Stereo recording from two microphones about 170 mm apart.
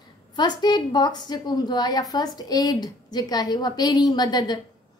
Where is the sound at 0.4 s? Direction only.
25° left (ahead or behind).